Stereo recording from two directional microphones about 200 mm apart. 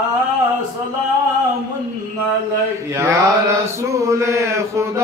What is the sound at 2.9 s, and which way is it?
Mantra, 15° right (ahead or behind).